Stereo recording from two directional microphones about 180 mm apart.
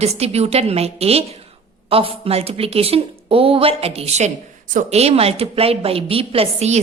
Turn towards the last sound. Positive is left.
turn(degrees=-35)  # may be behind; listen again after turning